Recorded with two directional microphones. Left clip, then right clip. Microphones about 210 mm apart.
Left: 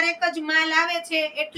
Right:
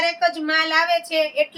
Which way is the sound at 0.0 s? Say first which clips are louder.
Right 3 dB; 50° right (ahead or behind).